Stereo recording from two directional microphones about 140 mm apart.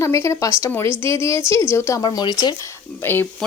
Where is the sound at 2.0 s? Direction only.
30° left (ahead or behind).